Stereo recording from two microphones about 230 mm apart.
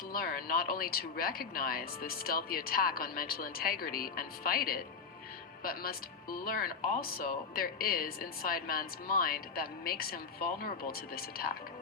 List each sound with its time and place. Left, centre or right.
0.1 s speech: left